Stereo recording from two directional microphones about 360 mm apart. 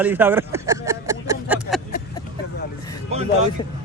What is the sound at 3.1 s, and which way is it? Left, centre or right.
Vehicle, centre.